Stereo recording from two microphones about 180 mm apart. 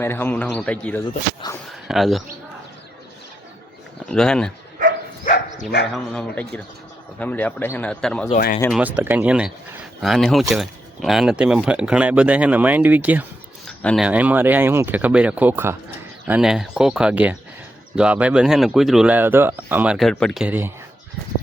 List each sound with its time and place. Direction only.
0.0 s speech: 10° left (ahead or behind)
1.4 s speech: 25° left (ahead or behind)
1.9 s speech: centre (ahead or behind)
4.0 s speech: 5° left (ahead or behind)
4.8 s dog: 50° right (ahead or behind)
5.2 s bow-wow: 45° left (ahead or behind)
5.9 s speech: 5° left (ahead or behind)
8.7 s speech: 10° right (ahead or behind)
13.7 s speech: centre (ahead or behind)